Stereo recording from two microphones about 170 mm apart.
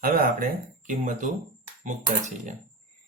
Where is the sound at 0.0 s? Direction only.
60° right (ahead or behind).